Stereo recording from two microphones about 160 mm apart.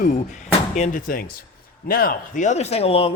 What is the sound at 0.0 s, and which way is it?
A man's voice, 50° left (ahead or behind).